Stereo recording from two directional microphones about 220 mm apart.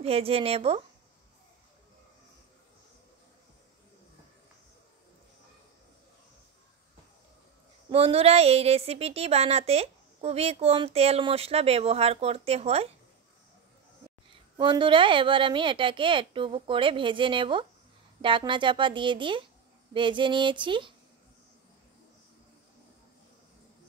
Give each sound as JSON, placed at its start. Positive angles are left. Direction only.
{"t": 0.0, "sound": "a woman's voice", "side_deg": -25}
{"t": 7.9, "sound": "a woman's voice", "side_deg": -25}
{"t": 14.6, "sound": "a woman's voice", "side_deg": -20}